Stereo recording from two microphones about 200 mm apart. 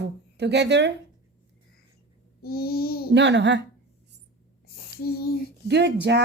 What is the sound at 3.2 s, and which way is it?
Speech, 60° right (ahead or behind).